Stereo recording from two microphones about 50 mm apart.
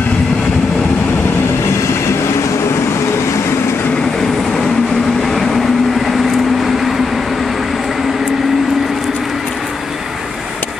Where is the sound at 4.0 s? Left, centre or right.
Centre.